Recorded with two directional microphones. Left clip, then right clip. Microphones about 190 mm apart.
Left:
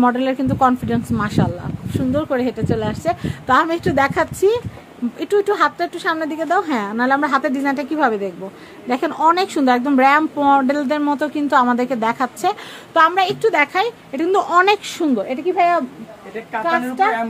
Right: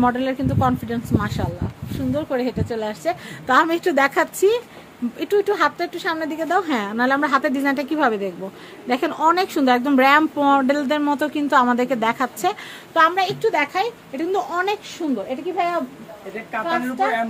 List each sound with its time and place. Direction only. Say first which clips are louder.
0.0 s speech: left 3 dB; 15° left (ahead or behind)
3.4 s speech: left 1 dB; 5° left (ahead or behind)
12.9 s a woman's voice: left 3 dB; 30° left (ahead or behind); by 14.8 s 45° left (ahead or behind)
15.0 s a woman's voice: left 5 dB; 60° left (ahead or behind)
17.0 s a woman's voice: left 4 dB; 65° left (ahead or behind)